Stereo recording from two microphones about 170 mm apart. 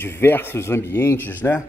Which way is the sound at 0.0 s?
15° left (ahead or behind).